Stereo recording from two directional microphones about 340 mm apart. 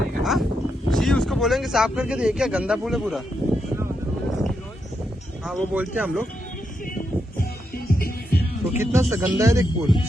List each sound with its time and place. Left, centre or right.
0.2 s a sound: centre
0.9 s speech: centre
5.5 s speech: centre
7.9 s music: left
8.8 s speech: centre